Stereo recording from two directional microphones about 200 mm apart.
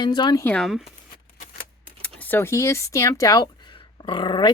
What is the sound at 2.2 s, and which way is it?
Speech, 10° left (ahead or behind).